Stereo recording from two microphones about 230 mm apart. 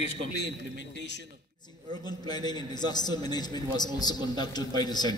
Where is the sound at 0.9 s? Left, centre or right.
Left.